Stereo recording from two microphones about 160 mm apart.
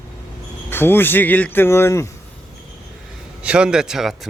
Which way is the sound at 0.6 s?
15° left (ahead or behind).